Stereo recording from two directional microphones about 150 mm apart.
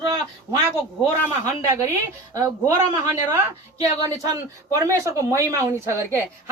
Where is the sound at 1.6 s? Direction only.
20° right (ahead or behind).